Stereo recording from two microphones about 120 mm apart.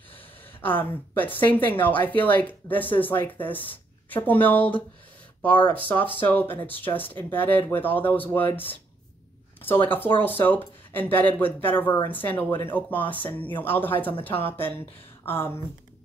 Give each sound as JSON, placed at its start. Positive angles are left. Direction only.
{"t": 0.6, "sound": "a woman's voice", "side_deg": 15}
{"t": 9.8, "sound": "a woman's voice", "side_deg": 15}